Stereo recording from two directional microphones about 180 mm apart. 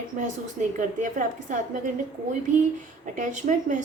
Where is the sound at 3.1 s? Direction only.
45° right (ahead or behind).